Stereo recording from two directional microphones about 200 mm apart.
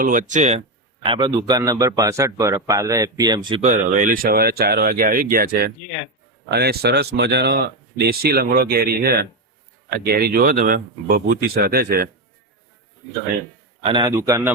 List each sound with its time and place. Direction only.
0.0 s speech: 40° right (ahead or behind)
1.0 s a man's voice: 25° right (ahead or behind)
3.6 s speech: 40° right (ahead or behind)
13.8 s a man's voice: 25° right (ahead or behind)